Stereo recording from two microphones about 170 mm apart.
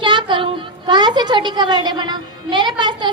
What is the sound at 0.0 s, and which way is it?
A woman's voice, 30° right (ahead or behind).